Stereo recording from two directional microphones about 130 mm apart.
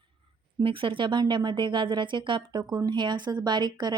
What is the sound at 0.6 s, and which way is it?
A woman's voice, 40° right (ahead or behind).